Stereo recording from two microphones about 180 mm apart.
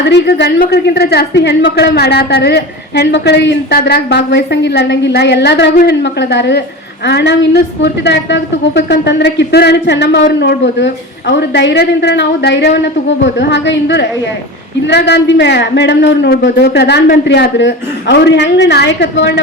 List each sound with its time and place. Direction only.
0.1 s a woman's voice: 75° left (ahead or behind)
10.4 s a woman's voice: 85° left